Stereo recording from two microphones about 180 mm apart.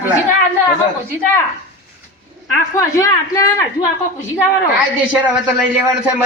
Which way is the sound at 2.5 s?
15° left (ahead or behind).